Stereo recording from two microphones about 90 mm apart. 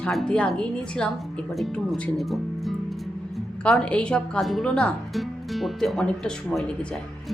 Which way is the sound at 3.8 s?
10° left (ahead or behind).